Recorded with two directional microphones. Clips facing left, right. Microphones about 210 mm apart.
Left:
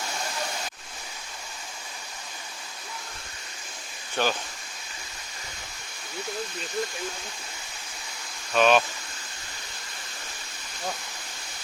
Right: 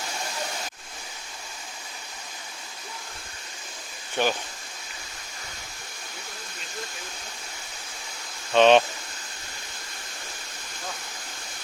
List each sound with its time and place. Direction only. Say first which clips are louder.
4.2 s speech: right 1 dB; 15° right (ahead or behind)
8.5 s speech: right 4 dB; 30° right (ahead or behind)